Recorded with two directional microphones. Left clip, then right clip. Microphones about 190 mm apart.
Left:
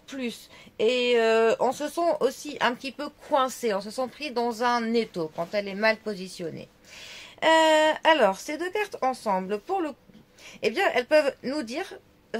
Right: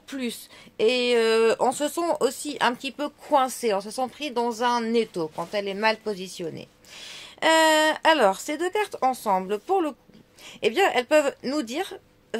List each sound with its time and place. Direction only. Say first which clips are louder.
0.1 s speech: right 2 dB; 45° right (ahead or behind)